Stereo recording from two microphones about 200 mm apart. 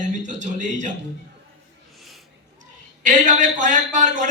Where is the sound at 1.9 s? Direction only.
Centre (ahead or behind).